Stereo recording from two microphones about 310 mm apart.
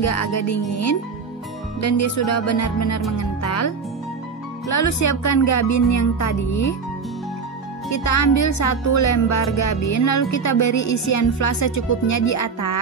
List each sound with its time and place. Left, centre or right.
0.0 s speech: left
3.2 s music: left
4.6 s speech: left
7.9 s speech: left